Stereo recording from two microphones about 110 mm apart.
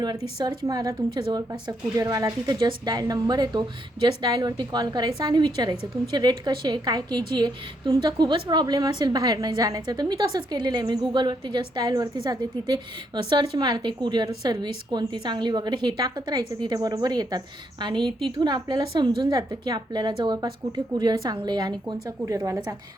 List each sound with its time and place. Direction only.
0.4 s a woman's voice: 35° right (ahead or behind)
22.0 s speech: 30° right (ahead or behind)